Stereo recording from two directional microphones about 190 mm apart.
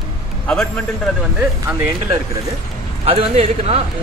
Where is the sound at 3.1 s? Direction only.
30° right (ahead or behind).